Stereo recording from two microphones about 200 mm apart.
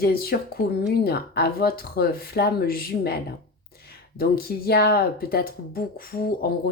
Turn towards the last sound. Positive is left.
turn(degrees=50)  # may be behind; listen again after turning